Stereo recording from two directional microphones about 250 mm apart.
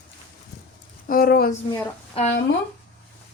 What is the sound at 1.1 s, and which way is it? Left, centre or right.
Speech, left.